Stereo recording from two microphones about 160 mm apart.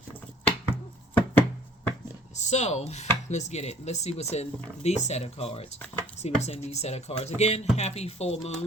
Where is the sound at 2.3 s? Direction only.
45° left (ahead or behind).